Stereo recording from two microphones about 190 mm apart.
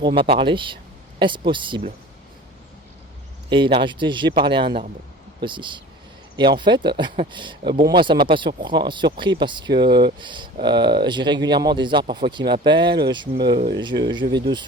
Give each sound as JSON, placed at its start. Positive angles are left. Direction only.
{"t": 0.2, "sound": "speech", "side_deg": -25}
{"t": 3.5, "sound": "speech", "side_deg": -25}